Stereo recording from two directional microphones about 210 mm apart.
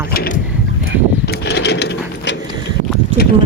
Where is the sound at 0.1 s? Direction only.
45° left (ahead or behind).